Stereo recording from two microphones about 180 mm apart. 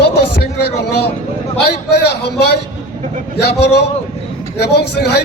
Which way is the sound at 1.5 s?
65° left (ahead or behind).